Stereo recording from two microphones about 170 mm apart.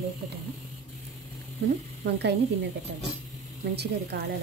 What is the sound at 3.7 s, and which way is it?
Speech, 75° right (ahead or behind).